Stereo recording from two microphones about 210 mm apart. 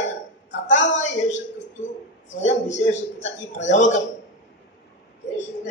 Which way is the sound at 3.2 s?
35° left (ahead or behind).